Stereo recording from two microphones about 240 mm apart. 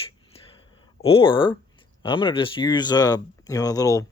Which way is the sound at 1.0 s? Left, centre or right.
Left.